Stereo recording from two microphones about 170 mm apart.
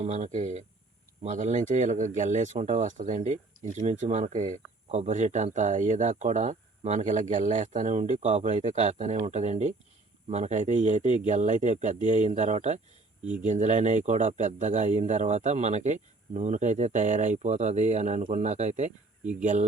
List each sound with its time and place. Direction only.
0.0 s speech: 45° right (ahead or behind)